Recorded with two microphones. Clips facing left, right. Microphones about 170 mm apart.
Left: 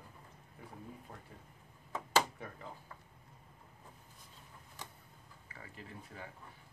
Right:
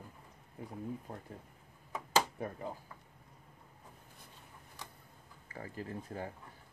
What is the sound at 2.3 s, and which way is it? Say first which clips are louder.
Speech: right 8 dB; 40° right (ahead or behind).